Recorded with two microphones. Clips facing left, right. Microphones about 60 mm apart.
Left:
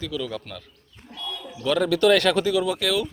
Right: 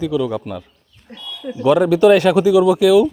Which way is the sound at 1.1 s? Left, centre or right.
Right.